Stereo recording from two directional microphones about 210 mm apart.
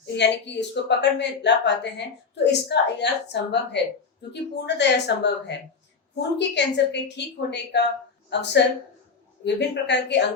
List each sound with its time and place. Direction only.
0.2 s a woman's voice: 55° left (ahead or behind)